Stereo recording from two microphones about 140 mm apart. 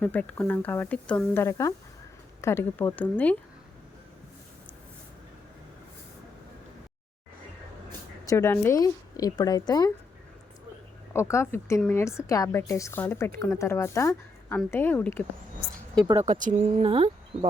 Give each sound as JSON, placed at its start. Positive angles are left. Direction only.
{"t": 0.0, "sound": "speech", "side_deg": 10}
{"t": 8.3, "sound": "a woman's voice", "side_deg": 15}
{"t": 11.1, "sound": "a woman's voice", "side_deg": 20}
{"t": 16.2, "sound": "speech", "side_deg": -65}